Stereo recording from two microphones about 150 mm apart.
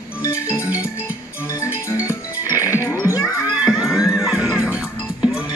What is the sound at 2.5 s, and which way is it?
Music, 20° left (ahead or behind).